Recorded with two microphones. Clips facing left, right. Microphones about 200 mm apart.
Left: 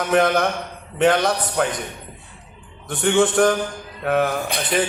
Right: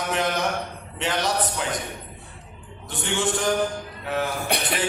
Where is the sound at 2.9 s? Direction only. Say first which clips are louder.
Left 8 dB; 55° left (ahead or behind).